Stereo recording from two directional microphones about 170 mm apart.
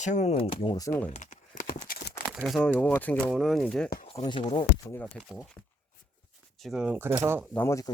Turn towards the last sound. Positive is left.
turn(degrees=15)  # may be behind; listen again after turning